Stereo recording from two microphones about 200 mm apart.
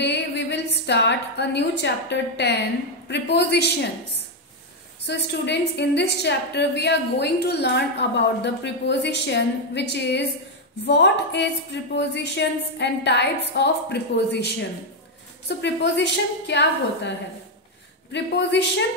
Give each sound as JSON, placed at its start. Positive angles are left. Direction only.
{"t": 0.0, "sound": "a woman's voice", "side_deg": 60}
{"t": 5.0, "sound": "a woman's voice", "side_deg": 60}
{"t": 18.1, "sound": "a woman's voice", "side_deg": 60}